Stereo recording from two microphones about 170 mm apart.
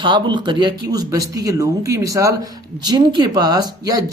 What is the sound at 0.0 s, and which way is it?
Speech, 25° right (ahead or behind).